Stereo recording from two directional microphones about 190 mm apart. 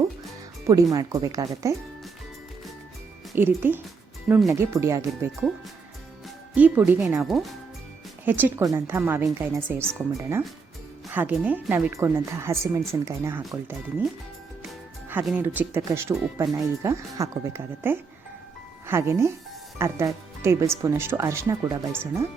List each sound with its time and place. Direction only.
0.7 s speech: 15° right (ahead or behind)
3.3 s speech: 10° right (ahead or behind)
4.5 s speech: 15° right (ahead or behind)
15.1 s speech: 10° right (ahead or behind)